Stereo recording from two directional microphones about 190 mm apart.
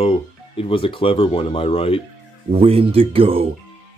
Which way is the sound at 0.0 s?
30° left (ahead or behind).